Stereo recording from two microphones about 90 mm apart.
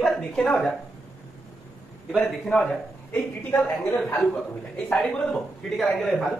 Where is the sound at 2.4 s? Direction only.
5° left (ahead or behind).